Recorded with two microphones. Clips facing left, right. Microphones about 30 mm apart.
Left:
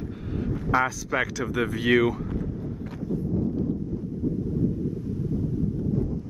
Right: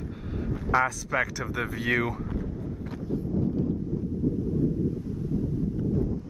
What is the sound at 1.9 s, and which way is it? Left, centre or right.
Speech, left.